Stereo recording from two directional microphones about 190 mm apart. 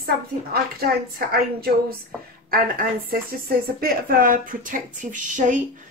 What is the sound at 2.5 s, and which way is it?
Speech, 50° right (ahead or behind).